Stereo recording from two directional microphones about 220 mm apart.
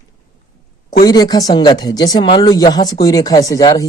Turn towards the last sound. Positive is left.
turn(degrees=15)  # may be behind; listen again after turning